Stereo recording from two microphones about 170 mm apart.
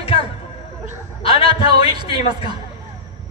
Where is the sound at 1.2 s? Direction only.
35° left (ahead or behind).